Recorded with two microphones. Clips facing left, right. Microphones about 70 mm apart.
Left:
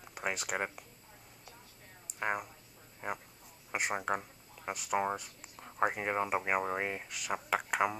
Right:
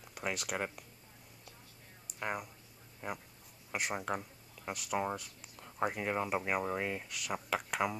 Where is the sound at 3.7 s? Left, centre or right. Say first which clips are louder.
Left 3 dB; left.